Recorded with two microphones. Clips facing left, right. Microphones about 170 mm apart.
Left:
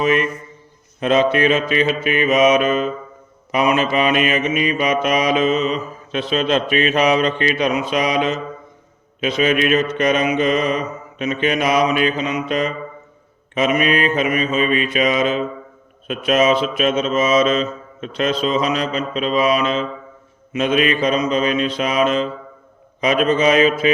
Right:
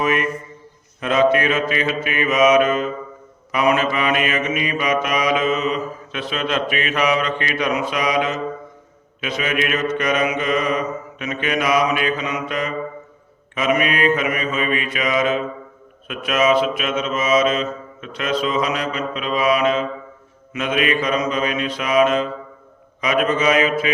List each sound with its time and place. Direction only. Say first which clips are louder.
0.0 s mantra: left 2 dB; 25° left (ahead or behind)